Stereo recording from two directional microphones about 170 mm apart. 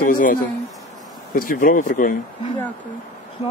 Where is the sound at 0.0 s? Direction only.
55° left (ahead or behind).